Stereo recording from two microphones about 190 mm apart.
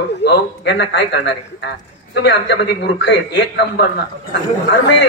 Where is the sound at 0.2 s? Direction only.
65° left (ahead or behind).